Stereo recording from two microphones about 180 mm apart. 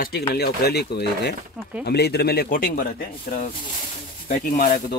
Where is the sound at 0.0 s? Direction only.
60° left (ahead or behind).